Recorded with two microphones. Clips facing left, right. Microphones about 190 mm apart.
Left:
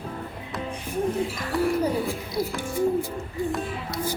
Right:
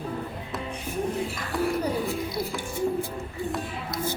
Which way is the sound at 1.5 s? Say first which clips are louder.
Left 3 dB; centre (ahead or behind).